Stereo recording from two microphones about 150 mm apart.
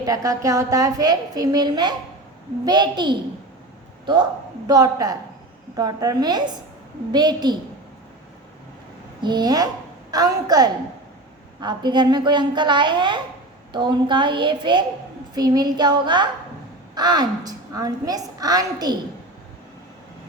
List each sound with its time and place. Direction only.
0.0 s a woman's voice: 25° right (ahead or behind)
9.2 s a woman's voice: 30° right (ahead or behind)